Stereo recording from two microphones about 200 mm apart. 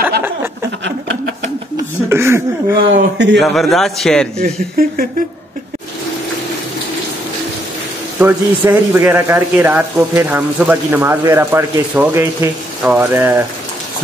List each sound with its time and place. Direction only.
0.7 s a sound: 70° right (ahead or behind)
2.0 s a sound: 10° right (ahead or behind)
2.9 s a man's voice: 60° right (ahead or behind)
3.3 s a man's voice: centre (ahead or behind)
4.4 s speech: 45° right (ahead or behind)
8.2 s speech: 10° right (ahead or behind)